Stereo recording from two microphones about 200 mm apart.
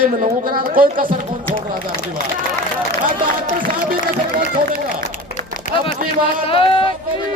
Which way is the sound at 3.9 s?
45° right (ahead or behind).